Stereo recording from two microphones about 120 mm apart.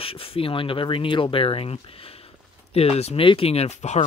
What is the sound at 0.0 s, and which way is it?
Speech, 50° left (ahead or behind).